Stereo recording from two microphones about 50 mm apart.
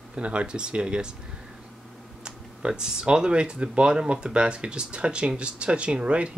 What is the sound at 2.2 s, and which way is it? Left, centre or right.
Speech, centre.